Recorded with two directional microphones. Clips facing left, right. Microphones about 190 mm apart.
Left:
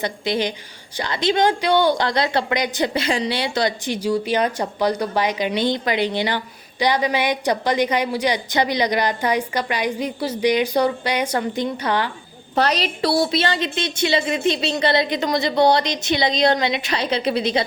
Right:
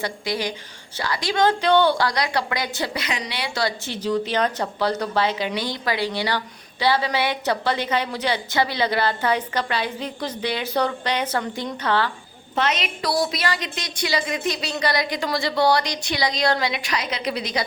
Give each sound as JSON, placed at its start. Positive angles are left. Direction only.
{"t": 0.0, "sound": "a woman's voice", "side_deg": 20}
{"t": 12.5, "sound": "a woman's voice", "side_deg": 35}